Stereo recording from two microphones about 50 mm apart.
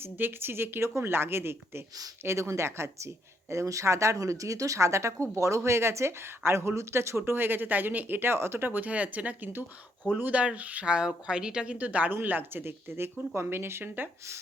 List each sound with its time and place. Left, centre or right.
0.0 s speech: right
2.2 s speech: right
3.5 s speech: right
8.6 s speech: right
10.3 s speech: right
10.8 s speech: centre
12.1 s speech: right